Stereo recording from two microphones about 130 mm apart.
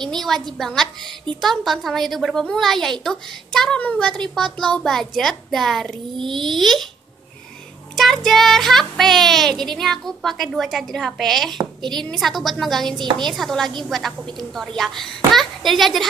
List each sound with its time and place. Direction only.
0.0 s speech: centre (ahead or behind)
7.9 s speech: centre (ahead or behind)
11.5 s speech: 35° right (ahead or behind)
12.0 s speech: centre (ahead or behind)